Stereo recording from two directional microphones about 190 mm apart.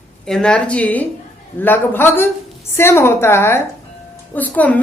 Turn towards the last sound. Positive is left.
turn(degrees=10)  # may be behind; listen again after turning